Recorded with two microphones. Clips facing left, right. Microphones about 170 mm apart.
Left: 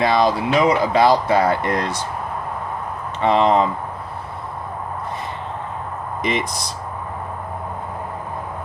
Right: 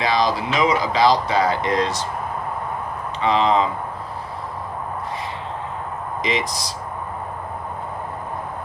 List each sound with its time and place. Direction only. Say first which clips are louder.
0.0 s speech: left 3 dB; 55° left (ahead or behind)
3.2 s speech: left 3 dB; 50° left (ahead or behind)
6.2 s speech: left 1 dB; 55° left (ahead or behind)